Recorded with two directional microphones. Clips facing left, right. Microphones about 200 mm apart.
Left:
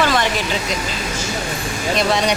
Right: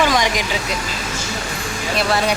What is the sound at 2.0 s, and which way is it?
Speech, 5° right (ahead or behind).